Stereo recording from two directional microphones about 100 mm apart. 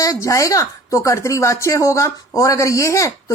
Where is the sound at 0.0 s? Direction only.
35° left (ahead or behind).